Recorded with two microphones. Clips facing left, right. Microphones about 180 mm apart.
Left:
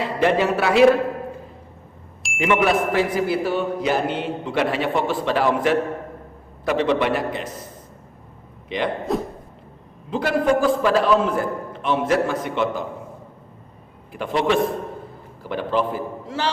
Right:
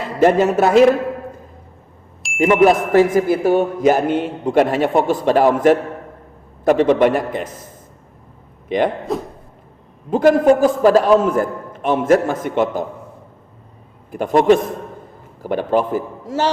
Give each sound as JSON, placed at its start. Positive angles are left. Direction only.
{"t": 0.2, "sound": "speech", "side_deg": -45}
{"t": 2.4, "sound": "speech", "side_deg": -45}
{"t": 8.7, "sound": "speech", "side_deg": -45}
{"t": 9.1, "sound": "cough", "side_deg": 0}
{"t": 10.1, "sound": "speech", "side_deg": -45}
{"t": 14.1, "sound": "a man's voice", "side_deg": -45}